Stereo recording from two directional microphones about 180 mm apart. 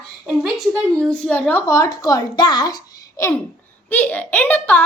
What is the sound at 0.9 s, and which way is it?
A woman's voice, 5° left (ahead or behind).